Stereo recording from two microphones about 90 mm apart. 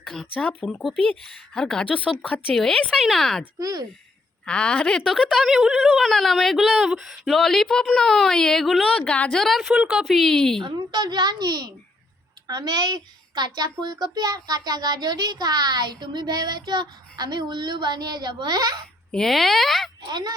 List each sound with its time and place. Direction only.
0.0 s a woman's voice: 10° left (ahead or behind)
3.6 s a child's voice: 45° right (ahead or behind)
4.4 s a woman's voice: 10° left (ahead or behind)
4.9 s a woman's voice: centre (ahead or behind)
9.4 s speech: centre (ahead or behind)
10.6 s a child's voice: 55° right (ahead or behind)
19.1 s speech: 5° left (ahead or behind)
20.1 s a child's voice: 50° right (ahead or behind)